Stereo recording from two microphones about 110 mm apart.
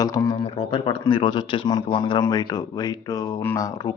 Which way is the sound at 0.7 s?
45° left (ahead or behind).